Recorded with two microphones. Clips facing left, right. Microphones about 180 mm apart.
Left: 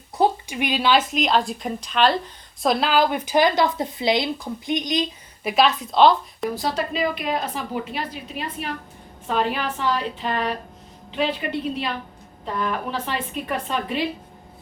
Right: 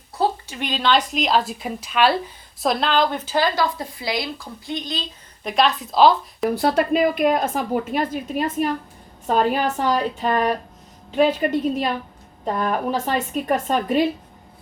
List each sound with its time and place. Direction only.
0.2 s a woman's voice: 15° left (ahead or behind)
6.5 s a woman's voice: 60° right (ahead or behind); by 14.1 s 45° right (ahead or behind)